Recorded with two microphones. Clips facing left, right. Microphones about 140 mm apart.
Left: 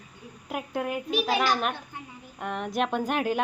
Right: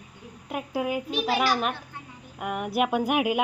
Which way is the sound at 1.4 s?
5° right (ahead or behind).